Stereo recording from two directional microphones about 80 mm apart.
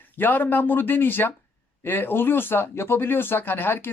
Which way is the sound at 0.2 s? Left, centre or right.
Left.